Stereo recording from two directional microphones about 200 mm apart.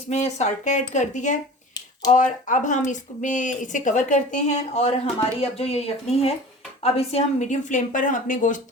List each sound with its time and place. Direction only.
0.1 s speech: 35° left (ahead or behind)